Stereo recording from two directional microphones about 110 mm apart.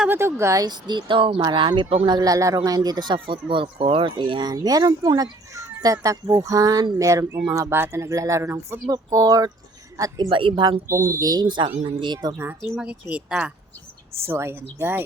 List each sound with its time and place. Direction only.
0.1 s speech: 25° right (ahead or behind); by 1.9 s 45° right (ahead or behind)
2.0 s speech: 35° right (ahead or behind)
10.2 s speech: 50° right (ahead or behind)
11.0 s speech: 30° right (ahead or behind)
12.7 s speech: 10° right (ahead or behind)
14.2 s speech: 25° right (ahead or behind)